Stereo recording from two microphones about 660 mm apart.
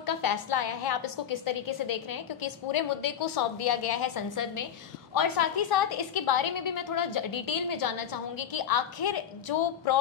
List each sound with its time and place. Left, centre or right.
0.0 s a woman's voice: left